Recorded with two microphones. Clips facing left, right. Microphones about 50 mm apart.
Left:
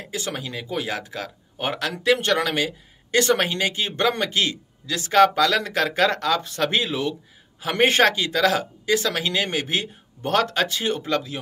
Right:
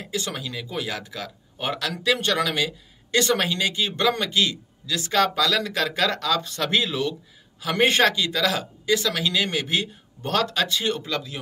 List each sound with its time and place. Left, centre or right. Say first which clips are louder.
0.1 s speech: even; left